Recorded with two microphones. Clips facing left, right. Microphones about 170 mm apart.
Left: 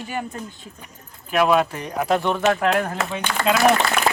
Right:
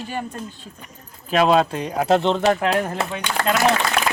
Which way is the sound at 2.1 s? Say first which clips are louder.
Right 2 dB; 25° right (ahead or behind).